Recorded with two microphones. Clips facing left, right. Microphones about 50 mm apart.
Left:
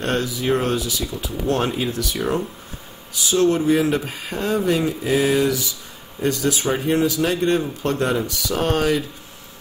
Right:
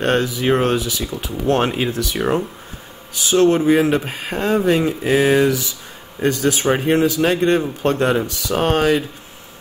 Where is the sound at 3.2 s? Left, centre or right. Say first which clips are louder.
Right 4 dB; right.